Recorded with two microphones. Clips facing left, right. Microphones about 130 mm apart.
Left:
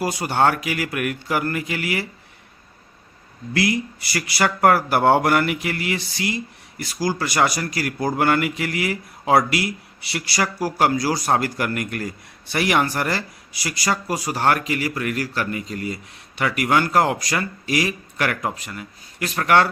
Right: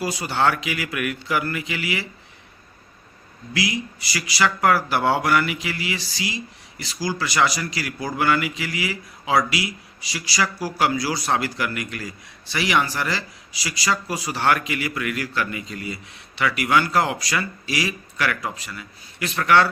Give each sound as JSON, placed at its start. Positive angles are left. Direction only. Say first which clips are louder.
{"t": 0.0, "sound": "speech", "louder": "left 2 dB", "side_deg": 50}
{"t": 3.5, "sound": "speech", "louder": "left 4 dB", "side_deg": 55}